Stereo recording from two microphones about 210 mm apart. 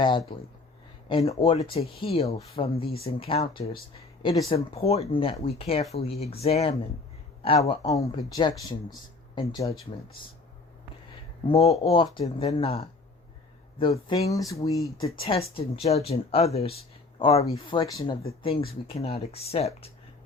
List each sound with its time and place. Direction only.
0.0 s speech: 25° left (ahead or behind)
7.6 s speech: 20° left (ahead or behind)
11.4 s speech: 30° left (ahead or behind)
14.3 s speech: 15° left (ahead or behind)
15.2 s speech: 25° left (ahead or behind)